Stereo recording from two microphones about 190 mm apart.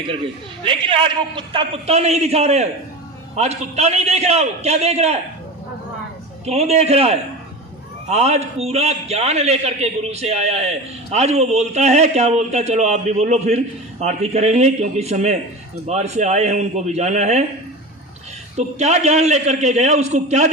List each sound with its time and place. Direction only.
0.6 s a man's voice: 25° right (ahead or behind)
6.4 s a man's voice: 35° right (ahead or behind)
18.5 s a man's voice: 35° right (ahead or behind)